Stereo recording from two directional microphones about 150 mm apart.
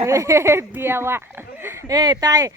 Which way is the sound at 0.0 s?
20° right (ahead or behind).